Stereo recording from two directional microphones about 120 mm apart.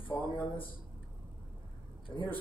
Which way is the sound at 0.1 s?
15° left (ahead or behind).